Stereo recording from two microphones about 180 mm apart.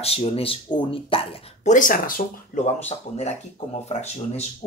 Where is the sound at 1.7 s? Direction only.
50° left (ahead or behind).